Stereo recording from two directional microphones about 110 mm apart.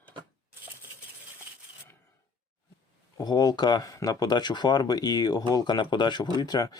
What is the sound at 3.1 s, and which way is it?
Speech, 40° left (ahead or behind).